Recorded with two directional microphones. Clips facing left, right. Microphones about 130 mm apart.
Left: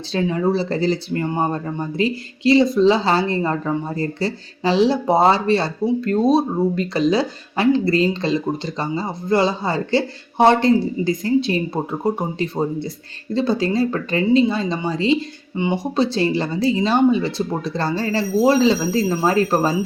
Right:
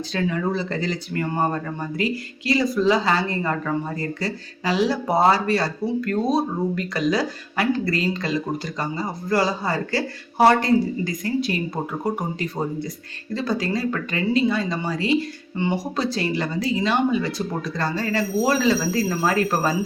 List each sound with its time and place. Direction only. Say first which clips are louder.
0.1 s speech: left 5 dB; 30° left (ahead or behind)